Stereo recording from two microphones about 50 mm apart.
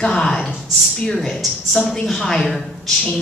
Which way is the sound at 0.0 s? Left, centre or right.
Centre.